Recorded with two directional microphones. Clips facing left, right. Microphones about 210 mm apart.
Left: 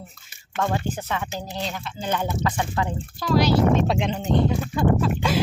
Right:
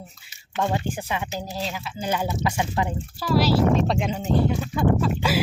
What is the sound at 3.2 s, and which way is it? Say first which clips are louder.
Speech: left 1 dB; 5° right (ahead or behind).